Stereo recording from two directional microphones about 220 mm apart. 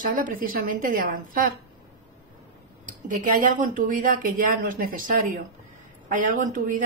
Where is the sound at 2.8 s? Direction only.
35° right (ahead or behind).